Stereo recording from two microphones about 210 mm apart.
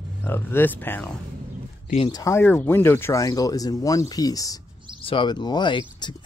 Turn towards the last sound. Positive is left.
turn(degrees=20)  # may be behind; listen again after turning